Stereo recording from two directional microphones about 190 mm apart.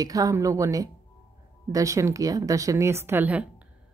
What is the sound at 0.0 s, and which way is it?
Speech, 20° right (ahead or behind).